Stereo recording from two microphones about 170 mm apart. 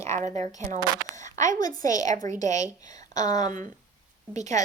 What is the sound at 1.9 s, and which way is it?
Speech, 20° left (ahead or behind).